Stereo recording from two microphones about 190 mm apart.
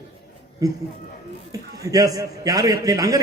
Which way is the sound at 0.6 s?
20° right (ahead or behind).